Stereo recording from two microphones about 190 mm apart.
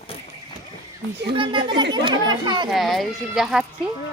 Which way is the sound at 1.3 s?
25° right (ahead or behind).